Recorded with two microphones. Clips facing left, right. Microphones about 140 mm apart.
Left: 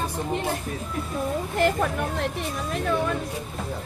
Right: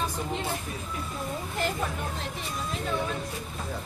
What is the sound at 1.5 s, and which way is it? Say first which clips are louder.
Speech: left 8 dB; 60° left (ahead or behind).